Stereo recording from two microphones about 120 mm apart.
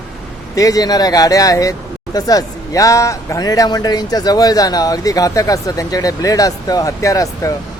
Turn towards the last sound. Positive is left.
turn(degrees=25)  # may be behind; listen again after turning